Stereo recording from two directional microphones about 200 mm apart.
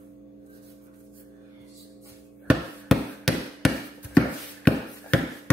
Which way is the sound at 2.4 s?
Centre (ahead or behind).